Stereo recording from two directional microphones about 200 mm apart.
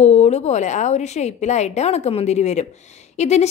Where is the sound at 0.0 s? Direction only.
35° left (ahead or behind).